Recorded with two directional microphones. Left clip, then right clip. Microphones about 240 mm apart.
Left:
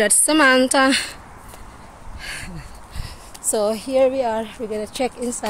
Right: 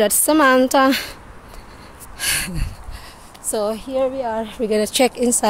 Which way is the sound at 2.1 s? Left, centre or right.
Right.